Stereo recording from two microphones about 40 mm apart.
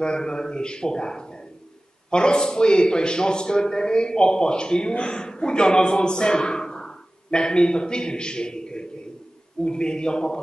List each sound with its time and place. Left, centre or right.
0.0 s a man's voice: left